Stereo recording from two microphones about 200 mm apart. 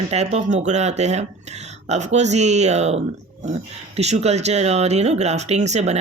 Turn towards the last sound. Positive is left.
turn(degrees=-35)  # may be behind; listen again after turning